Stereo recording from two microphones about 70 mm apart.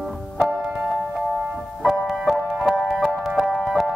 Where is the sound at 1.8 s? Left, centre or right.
Centre.